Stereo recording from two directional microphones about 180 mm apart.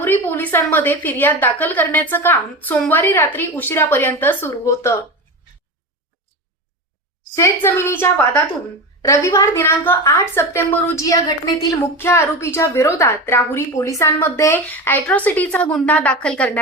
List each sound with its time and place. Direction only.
0.0 s a woman's voice: 10° left (ahead or behind)
7.3 s a woman's voice: 15° left (ahead or behind)